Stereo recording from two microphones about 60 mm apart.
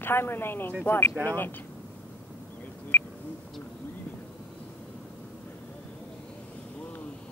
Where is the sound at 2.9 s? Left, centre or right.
Left.